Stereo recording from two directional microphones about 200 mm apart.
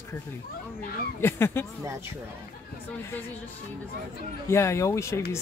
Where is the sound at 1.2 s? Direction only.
10° left (ahead or behind).